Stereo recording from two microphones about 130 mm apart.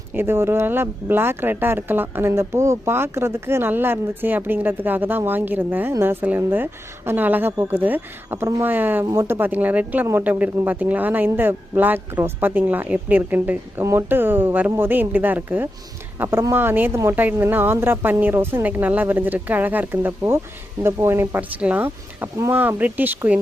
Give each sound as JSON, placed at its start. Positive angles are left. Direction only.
{"t": 0.1, "sound": "speech", "side_deg": -15}